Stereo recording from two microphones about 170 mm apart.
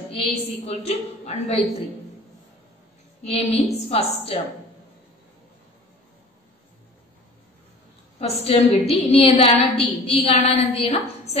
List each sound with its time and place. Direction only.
0.1 s a woman's voice: 35° left (ahead or behind)
3.3 s a woman's voice: 35° left (ahead or behind)
8.2 s a woman's voice: 35° left (ahead or behind)